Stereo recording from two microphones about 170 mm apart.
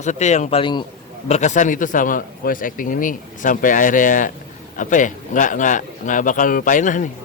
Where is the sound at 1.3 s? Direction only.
45° left (ahead or behind).